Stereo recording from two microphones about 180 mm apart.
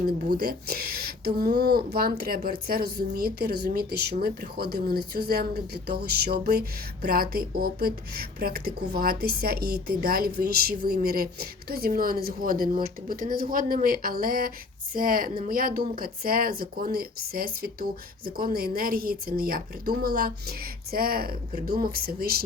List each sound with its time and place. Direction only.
0.3 s speech: 55° right (ahead or behind)